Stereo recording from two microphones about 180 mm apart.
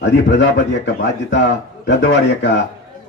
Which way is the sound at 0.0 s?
80° left.